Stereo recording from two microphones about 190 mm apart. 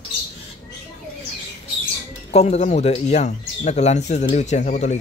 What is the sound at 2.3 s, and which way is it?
Speech, 35° left (ahead or behind).